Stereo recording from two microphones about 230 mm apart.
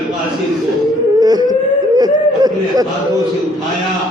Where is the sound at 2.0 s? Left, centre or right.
Centre.